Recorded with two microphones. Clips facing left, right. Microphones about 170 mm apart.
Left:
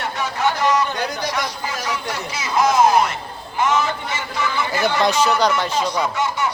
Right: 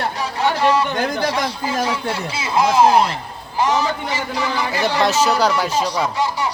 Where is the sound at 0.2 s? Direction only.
30° right (ahead or behind).